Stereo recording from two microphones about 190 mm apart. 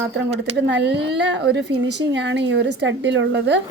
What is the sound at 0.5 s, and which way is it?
A woman's voice, 65° right (ahead or behind).